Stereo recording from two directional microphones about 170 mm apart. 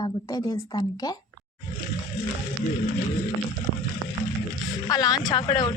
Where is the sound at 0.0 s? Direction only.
20° left (ahead or behind).